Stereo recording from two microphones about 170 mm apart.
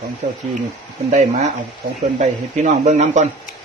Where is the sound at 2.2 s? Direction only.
40° right (ahead or behind).